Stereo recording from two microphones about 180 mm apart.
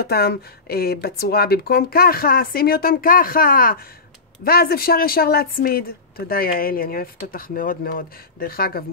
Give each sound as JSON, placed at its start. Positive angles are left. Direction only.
{"t": 0.0, "sound": "speech", "side_deg": 60}